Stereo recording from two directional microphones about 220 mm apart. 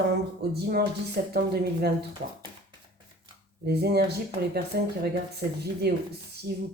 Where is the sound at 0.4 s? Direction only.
45° right (ahead or behind).